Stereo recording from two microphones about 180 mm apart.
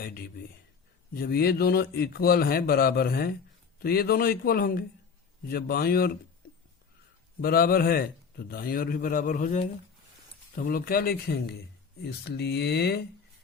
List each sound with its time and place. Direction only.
0.0 s a man's voice: 55° left (ahead or behind)
7.4 s a man's voice: 55° left (ahead or behind)